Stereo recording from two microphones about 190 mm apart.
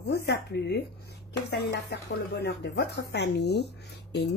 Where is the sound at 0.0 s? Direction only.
60° left (ahead or behind).